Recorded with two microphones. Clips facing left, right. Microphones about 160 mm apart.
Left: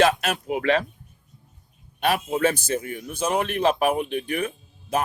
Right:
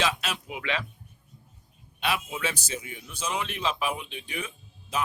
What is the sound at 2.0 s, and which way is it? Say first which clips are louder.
A man's voice: left 8 dB; 50° left (ahead or behind).